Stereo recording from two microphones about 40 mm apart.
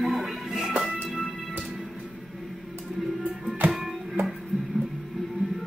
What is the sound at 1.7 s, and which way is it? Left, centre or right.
Music, centre.